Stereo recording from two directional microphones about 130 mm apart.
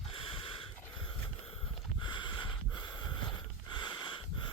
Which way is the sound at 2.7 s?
35° left (ahead or behind).